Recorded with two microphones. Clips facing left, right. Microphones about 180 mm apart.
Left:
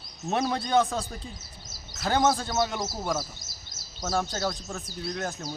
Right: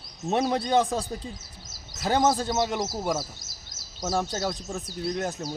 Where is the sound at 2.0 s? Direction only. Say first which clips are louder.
Right 1 dB; 15° right (ahead or behind).